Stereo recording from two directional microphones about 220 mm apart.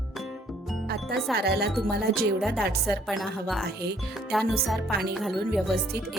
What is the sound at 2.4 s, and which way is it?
Speech, centre (ahead or behind).